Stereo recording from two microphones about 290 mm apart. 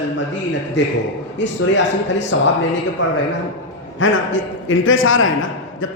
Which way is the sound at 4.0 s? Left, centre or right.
Left.